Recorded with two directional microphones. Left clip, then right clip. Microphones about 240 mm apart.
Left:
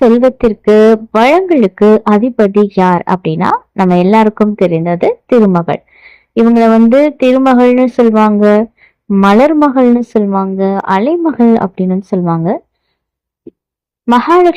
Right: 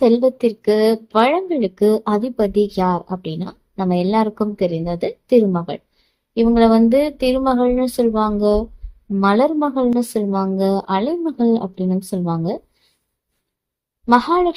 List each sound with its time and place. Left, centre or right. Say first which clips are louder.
0.0 s speech: left 7 dB; left
14.1 s speech: left 7 dB; left